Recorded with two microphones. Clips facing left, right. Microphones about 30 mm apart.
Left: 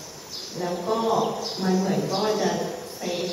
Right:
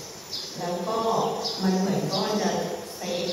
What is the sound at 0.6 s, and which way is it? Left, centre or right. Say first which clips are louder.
A woman's voice: left 2 dB; centre.